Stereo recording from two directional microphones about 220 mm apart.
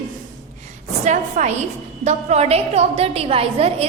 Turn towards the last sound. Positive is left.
turn(degrees=-25)  # may be behind; listen again after turning